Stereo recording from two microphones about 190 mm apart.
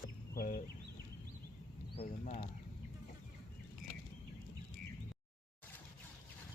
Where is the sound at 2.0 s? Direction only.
40° left (ahead or behind).